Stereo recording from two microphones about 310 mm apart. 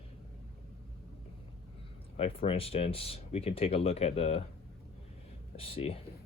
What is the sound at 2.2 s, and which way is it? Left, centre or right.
Speech, centre.